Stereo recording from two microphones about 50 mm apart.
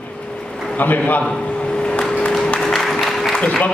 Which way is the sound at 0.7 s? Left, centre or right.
Left.